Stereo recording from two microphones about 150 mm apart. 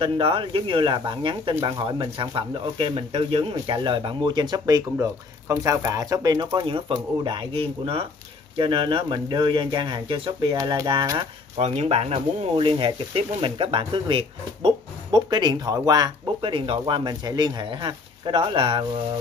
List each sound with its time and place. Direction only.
0.0 s speech: 35° right (ahead or behind)
11.6 s speech: 40° right (ahead or behind)